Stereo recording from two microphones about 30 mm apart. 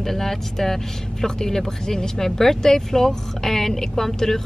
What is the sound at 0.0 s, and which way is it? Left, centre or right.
Speech, centre.